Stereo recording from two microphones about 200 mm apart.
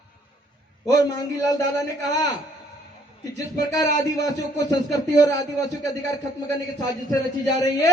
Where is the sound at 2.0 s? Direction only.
20° left (ahead or behind).